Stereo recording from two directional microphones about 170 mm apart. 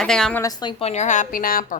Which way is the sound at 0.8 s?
40° left (ahead or behind).